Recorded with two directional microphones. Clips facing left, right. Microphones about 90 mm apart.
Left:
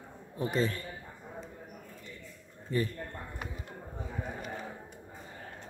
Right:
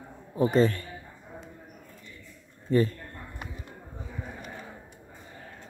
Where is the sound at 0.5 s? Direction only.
45° right (ahead or behind).